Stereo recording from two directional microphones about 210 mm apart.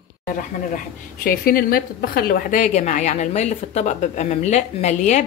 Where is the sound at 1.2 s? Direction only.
45° left (ahead or behind).